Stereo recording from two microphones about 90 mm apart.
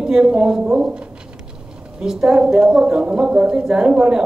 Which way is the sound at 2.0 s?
10° right (ahead or behind).